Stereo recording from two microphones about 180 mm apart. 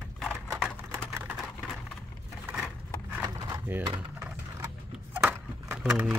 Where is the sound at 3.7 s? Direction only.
10° right (ahead or behind).